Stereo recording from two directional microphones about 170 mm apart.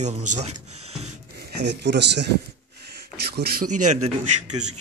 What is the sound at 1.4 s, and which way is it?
Speech, 80° right.